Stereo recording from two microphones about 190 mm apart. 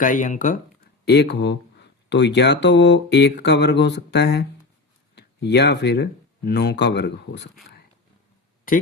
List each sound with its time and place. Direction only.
0.0 s speech: 45° left (ahead or behind)
1.0 s speech: 60° left (ahead or behind)